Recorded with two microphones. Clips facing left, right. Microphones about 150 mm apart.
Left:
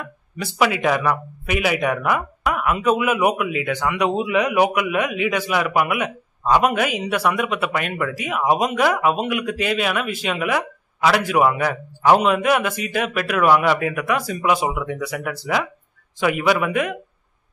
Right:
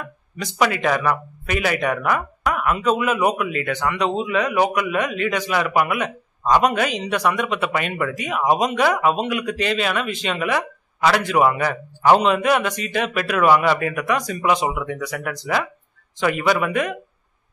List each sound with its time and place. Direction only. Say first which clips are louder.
0.6 s speech: left 1 dB; 5° left (ahead or behind)